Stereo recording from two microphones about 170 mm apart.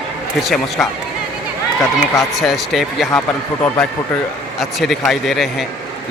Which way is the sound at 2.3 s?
Centre (ahead or behind).